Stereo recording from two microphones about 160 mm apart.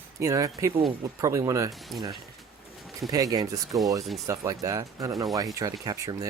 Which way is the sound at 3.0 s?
25° right (ahead or behind).